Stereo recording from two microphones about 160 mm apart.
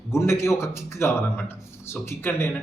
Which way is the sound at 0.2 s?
15° left (ahead or behind).